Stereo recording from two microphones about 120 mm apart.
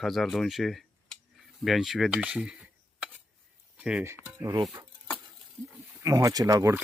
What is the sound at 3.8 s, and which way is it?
Speech, 5° right (ahead or behind).